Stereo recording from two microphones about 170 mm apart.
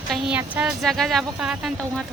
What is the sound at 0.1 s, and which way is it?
Speech, 5° right (ahead or behind).